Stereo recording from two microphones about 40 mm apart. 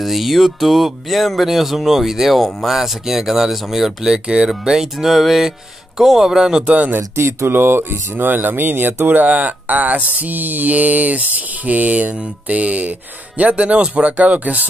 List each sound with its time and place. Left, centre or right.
0.0 s music: centre
5.9 s speech: centre
6.6 s mantra: right
6.9 s speech: right
8.3 s speech: right
9.2 s mantra: right
14.1 s mantra: right